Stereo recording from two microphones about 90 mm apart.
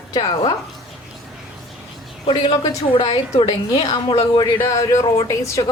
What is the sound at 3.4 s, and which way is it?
A woman's voice, 50° left (ahead or behind).